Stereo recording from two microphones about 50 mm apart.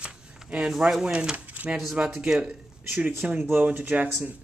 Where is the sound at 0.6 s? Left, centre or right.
Centre.